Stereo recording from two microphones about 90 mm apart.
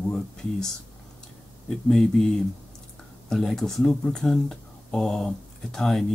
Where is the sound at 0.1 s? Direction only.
5° left (ahead or behind).